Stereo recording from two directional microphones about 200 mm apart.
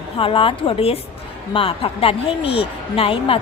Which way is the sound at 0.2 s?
25° left (ahead or behind).